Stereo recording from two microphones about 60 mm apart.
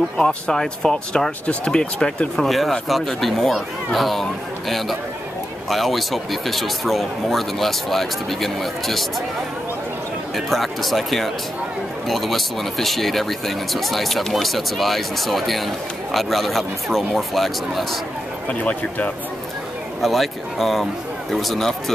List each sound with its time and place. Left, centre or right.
0.2 s speech: centre
2.3 s speech: centre
10.3 s speech: centre
18.5 s speech: left
20.0 s speech: centre